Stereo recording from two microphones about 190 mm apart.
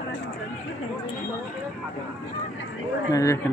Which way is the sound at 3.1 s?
15° left (ahead or behind).